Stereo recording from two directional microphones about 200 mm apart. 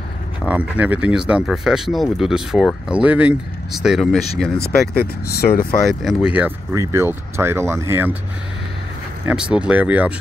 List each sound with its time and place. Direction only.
0.5 s speech: 5° right (ahead or behind)
4.9 s speech: 50° left (ahead or behind)
5.7 s speech: centre (ahead or behind)
9.2 s speech: 5° right (ahead or behind)